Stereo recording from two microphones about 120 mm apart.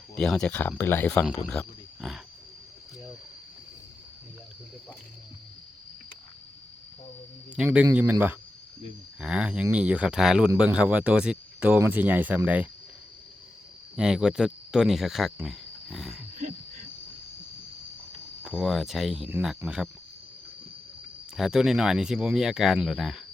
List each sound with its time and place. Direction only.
0.2 s speech: 5° left (ahead or behind)
1.5 s speech: centre (ahead or behind)
7.5 s speech: 10° right (ahead or behind)
9.2 s speech: 10° right (ahead or behind)
13.9 s speech: 5° right (ahead or behind)
18.5 s speech: centre (ahead or behind)
21.3 s speech: 5° right (ahead or behind)